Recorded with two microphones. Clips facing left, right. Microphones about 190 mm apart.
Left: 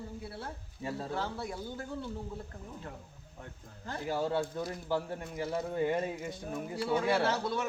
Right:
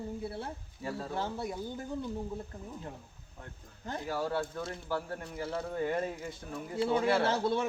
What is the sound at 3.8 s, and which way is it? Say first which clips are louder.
Speech: right 1 dB; 20° right (ahead or behind).